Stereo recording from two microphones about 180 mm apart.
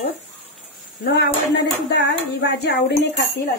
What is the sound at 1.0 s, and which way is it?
Speech, 70° left (ahead or behind).